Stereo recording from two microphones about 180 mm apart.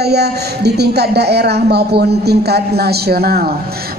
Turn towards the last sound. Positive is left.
turn(degrees=-60)  # may be behind; listen again after turning